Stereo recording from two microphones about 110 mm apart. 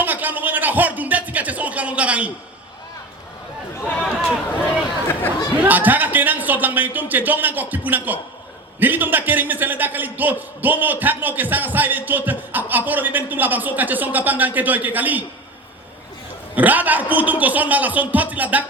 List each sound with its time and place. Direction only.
0.0 s music: 15° right (ahead or behind)
3.8 s a sound: 15° left (ahead or behind)
5.0 s chatter: 20° left (ahead or behind)
5.6 s a man's voice: 15° right (ahead or behind)
16.6 s a man's voice: 15° right (ahead or behind)